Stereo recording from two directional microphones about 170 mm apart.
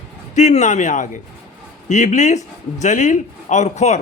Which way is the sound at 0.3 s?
45° left (ahead or behind).